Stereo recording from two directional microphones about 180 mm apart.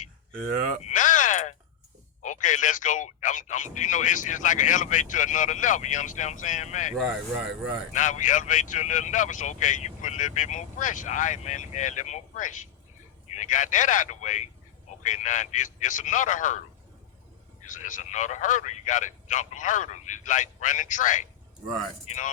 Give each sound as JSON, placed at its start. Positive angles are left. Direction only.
{"t": 0.8, "sound": "a sound", "side_deg": 40}
{"t": 2.2, "sound": "speech", "side_deg": 45}
{"t": 7.0, "sound": "speech", "side_deg": 0}
{"t": 7.9, "sound": "speech", "side_deg": 45}
{"t": 17.7, "sound": "speech", "side_deg": 45}